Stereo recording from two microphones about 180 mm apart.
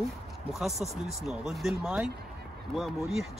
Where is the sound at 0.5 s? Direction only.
Centre (ahead or behind).